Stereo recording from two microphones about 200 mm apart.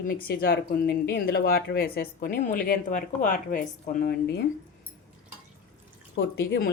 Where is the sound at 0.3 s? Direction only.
45° left (ahead or behind).